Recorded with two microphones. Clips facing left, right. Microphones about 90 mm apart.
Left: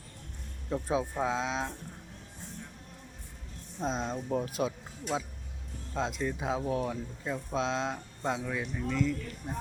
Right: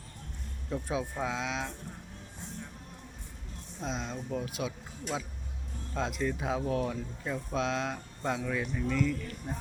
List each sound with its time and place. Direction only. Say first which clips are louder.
0.7 s speech: left 3 dB; 30° left (ahead or behind)
3.8 s speech: left 4 dB; 35° left (ahead or behind)
6.0 s speech: even; 20° left (ahead or behind)
8.4 s speech: right 2 dB; 10° left (ahead or behind)